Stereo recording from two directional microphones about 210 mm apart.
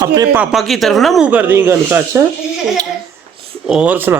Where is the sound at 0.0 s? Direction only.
20° right (ahead or behind).